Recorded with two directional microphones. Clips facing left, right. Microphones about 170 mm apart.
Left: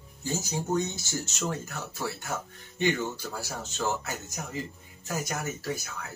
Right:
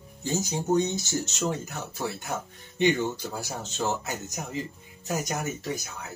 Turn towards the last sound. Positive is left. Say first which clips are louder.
# right 1 dB
turn(degrees=-20)  # may be behind; listen again after turning